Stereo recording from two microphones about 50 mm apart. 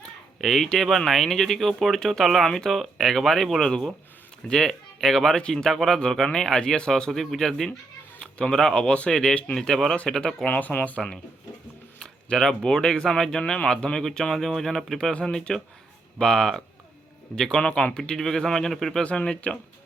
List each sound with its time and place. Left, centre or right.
0.4 s speech: centre
8.2 s cat: centre
8.7 s speech: centre
10.4 s speech: left
10.9 s speech: left
11.9 s speech: centre
19.0 s speech: centre